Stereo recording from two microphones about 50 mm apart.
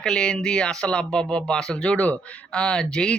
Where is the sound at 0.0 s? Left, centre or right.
Centre.